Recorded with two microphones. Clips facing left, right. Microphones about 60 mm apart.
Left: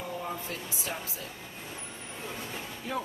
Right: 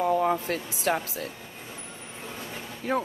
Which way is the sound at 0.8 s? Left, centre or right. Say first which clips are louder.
Right 13 dB; right.